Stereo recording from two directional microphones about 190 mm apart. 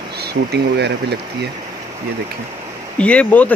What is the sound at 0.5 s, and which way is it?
Speech, 60° right (ahead or behind).